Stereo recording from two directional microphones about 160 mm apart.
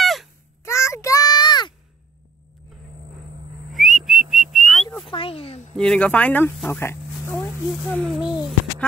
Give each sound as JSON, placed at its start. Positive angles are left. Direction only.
{"t": 0.0, "sound": "a sound", "side_deg": 0}
{"t": 0.7, "sound": "child singing", "side_deg": 15}
{"t": 3.7, "sound": "whistling", "side_deg": 0}
{"t": 5.0, "sound": "speech", "side_deg": 35}
{"t": 5.8, "sound": "speech", "side_deg": 5}
{"t": 7.4, "sound": "speech", "side_deg": 5}